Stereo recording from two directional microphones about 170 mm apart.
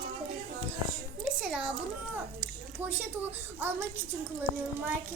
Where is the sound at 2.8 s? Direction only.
10° right (ahead or behind).